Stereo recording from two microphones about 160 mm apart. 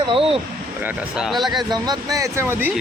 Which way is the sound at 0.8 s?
10° right (ahead or behind).